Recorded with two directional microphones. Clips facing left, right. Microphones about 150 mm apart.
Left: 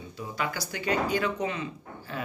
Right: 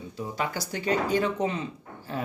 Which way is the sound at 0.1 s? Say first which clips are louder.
Right 2 dB; 35° right (ahead or behind).